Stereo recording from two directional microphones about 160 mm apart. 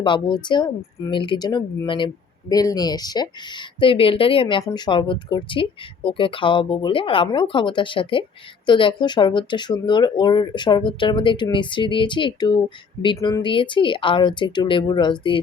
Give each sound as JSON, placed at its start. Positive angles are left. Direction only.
{"t": 0.0, "sound": "speech", "side_deg": 30}